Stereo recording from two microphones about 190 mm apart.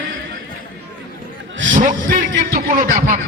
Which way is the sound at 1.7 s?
45° right (ahead or behind).